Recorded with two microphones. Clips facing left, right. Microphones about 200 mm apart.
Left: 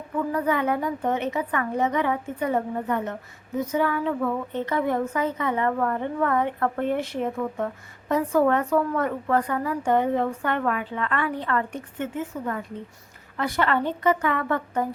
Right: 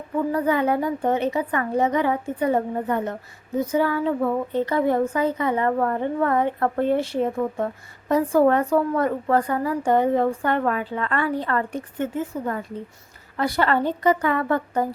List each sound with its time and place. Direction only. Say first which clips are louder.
0.3 s speech: right 3 dB; 35° right (ahead or behind)